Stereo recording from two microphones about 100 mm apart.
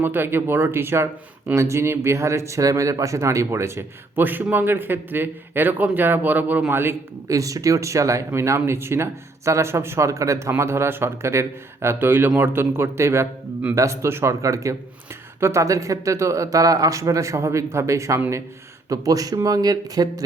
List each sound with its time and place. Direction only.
0.0 s speech: 20° right (ahead or behind); by 20.2 s 40° right (ahead or behind)